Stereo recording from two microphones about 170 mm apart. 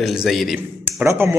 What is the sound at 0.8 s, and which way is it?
Speech, 15° right (ahead or behind).